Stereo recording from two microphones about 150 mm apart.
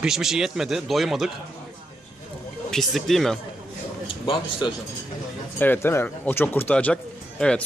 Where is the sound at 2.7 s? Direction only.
Centre (ahead or behind).